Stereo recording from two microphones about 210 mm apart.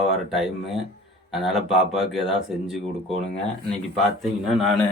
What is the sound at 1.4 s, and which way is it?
Speech, centre (ahead or behind).